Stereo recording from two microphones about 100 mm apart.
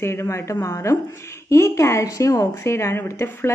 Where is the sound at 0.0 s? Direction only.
25° left (ahead or behind).